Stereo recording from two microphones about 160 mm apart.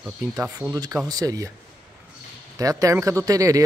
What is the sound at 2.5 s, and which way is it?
Speech, 20° right (ahead or behind).